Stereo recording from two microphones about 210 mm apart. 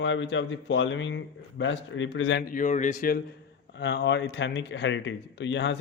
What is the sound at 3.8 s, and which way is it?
Speech, 55° left (ahead or behind).